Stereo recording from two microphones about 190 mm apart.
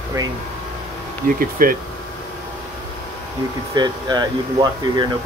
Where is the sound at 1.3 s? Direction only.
50° right (ahead or behind).